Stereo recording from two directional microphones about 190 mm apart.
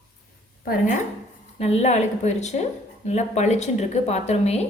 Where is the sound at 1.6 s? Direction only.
35° left (ahead or behind).